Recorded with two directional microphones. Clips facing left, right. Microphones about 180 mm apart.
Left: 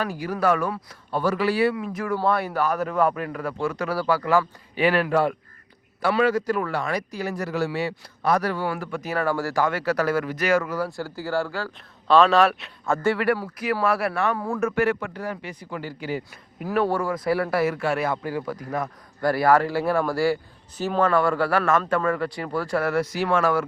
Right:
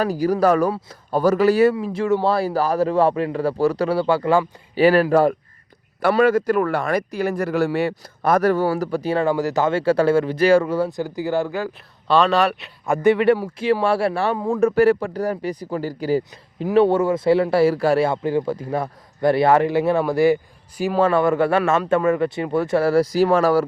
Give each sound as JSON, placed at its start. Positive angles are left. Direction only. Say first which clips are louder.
{"t": 0.0, "sound": "a man's voice", "louder": "right 6 dB", "side_deg": -40}
{"t": 1.7, "sound": "speech", "louder": "right 7 dB", "side_deg": -30}
{"t": 6.0, "sound": "a man's voice", "louder": "right 5 dB", "side_deg": -50}
{"t": 12.0, "sound": "speech", "louder": "even", "side_deg": 0}
{"t": 12.8, "sound": "speech", "louder": "right 6 dB", "side_deg": -15}
{"t": 14.3, "sound": "speech", "louder": "right 5 dB", "side_deg": -15}
{"t": 14.6, "sound": "a man's voice", "louder": "right 8 dB", "side_deg": -35}
{"t": 16.6, "sound": "speech", "louder": "right 7 dB", "side_deg": -25}
{"t": 21.0, "sound": "speech", "louder": "right 4 dB", "side_deg": -25}